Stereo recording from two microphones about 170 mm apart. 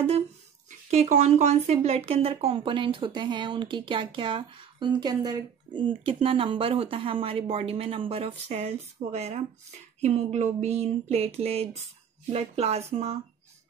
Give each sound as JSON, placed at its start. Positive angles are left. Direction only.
{"t": 0.7, "sound": "speech", "side_deg": -45}